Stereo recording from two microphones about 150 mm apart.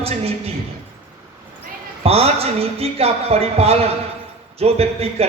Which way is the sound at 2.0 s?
40° right (ahead or behind).